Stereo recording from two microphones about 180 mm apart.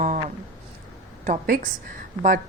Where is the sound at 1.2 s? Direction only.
45° right (ahead or behind).